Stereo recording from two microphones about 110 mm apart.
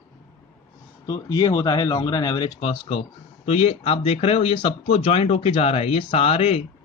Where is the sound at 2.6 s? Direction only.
65° left (ahead or behind).